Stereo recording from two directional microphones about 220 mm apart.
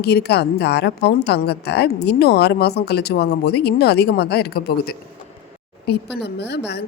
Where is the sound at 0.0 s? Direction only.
50° left (ahead or behind).